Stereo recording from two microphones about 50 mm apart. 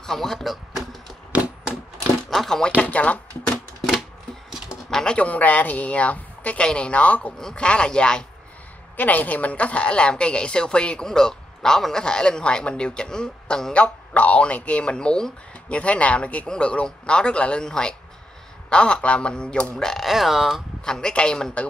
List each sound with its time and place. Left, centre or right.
0.0 s speech: centre
2.3 s a sound: centre
2.8 s speech: left
4.9 s a woman's voice: centre
8.9 s a woman's voice: left; by 13.7 s centre
13.7 s speech: left
15.7 s a woman's voice: left
19.8 s speech: centre
20.1 s speech: centre
20.8 s a man's voice: centre